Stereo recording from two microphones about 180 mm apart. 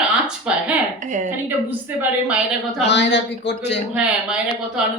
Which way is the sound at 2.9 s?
75° left (ahead or behind).